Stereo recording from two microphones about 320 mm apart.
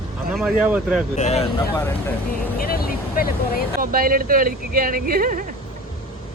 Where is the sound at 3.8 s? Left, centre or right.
Right.